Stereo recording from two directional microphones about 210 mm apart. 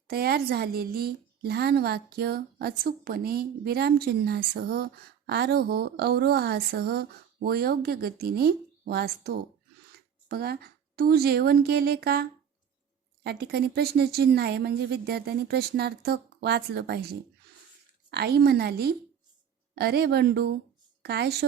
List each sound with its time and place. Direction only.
0.1 s a woman's voice: 45° right (ahead or behind)